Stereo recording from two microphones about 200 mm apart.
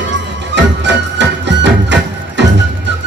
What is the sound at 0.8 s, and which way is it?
Music, 60° right (ahead or behind).